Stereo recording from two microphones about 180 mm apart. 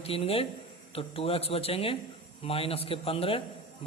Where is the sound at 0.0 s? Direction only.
35° left (ahead or behind).